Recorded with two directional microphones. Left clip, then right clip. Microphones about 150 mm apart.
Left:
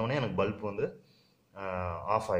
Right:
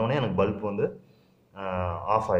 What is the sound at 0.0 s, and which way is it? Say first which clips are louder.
Speech: right 5 dB; 30° left (ahead or behind).